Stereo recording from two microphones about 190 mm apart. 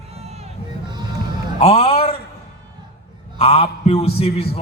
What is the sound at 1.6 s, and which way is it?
Speech, 30° left (ahead or behind).